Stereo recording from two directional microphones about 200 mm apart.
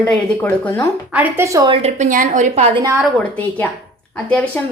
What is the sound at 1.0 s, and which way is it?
A woman's voice, 10° right (ahead or behind).